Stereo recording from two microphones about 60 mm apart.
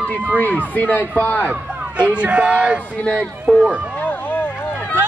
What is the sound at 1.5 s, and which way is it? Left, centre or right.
Speech, right.